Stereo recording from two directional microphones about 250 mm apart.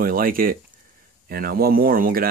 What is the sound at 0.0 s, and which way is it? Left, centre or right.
Speech, right.